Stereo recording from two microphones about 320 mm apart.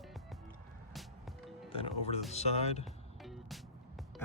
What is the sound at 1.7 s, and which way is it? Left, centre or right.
Speech, centre.